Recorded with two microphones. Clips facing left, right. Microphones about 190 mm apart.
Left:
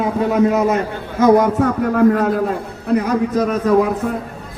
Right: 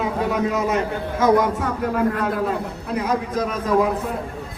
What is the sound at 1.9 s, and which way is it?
Speech, 45° left (ahead or behind).